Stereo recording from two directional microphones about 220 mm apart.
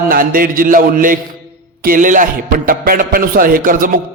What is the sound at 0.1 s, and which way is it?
A man's voice, 40° right (ahead or behind).